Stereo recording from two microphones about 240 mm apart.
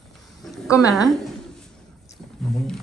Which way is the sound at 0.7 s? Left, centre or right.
Centre.